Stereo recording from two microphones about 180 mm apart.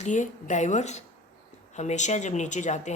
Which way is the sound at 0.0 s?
45° left (ahead or behind).